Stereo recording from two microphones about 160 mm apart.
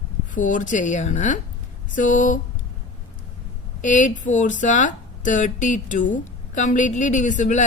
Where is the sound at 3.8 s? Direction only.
50° left (ahead or behind).